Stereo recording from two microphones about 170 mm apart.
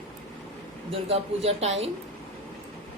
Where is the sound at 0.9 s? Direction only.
35° right (ahead or behind).